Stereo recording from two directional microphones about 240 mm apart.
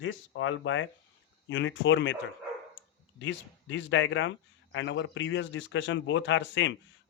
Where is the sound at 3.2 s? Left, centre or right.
Left.